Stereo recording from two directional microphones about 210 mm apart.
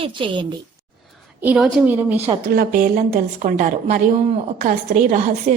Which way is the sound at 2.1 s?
30° right (ahead or behind).